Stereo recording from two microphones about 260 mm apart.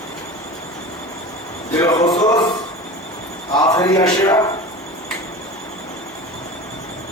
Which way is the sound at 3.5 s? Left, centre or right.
Centre.